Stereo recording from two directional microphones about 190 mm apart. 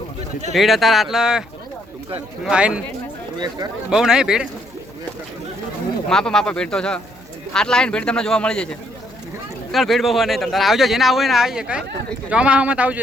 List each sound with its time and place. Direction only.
0.5 s speech: centre (ahead or behind)
3.3 s speech: 20° right (ahead or behind)
3.9 s speech: 5° right (ahead or behind)
6.1 s speech: 5° left (ahead or behind)
9.7 s speech: centre (ahead or behind)